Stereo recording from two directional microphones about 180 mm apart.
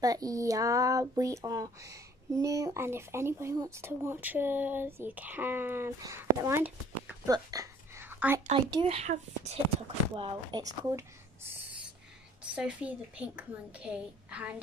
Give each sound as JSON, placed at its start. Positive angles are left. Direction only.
{"t": 0.0, "sound": "speech", "side_deg": -20}
{"t": 7.2, "sound": "a sound", "side_deg": -20}
{"t": 8.5, "sound": "speech", "side_deg": -25}
{"t": 8.8, "sound": "speech", "side_deg": -40}
{"t": 12.5, "sound": "speech", "side_deg": -5}